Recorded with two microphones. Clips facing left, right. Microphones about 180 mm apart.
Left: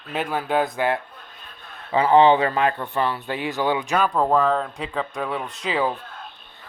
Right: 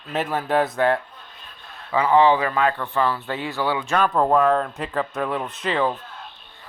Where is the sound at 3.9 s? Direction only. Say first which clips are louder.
Right 3 dB; centre (ahead or behind).